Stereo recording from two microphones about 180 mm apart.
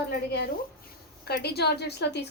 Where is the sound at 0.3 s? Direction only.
65° left (ahead or behind).